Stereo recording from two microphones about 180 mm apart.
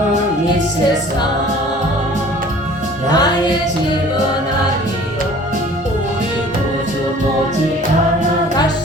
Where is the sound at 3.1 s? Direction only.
20° left (ahead or behind).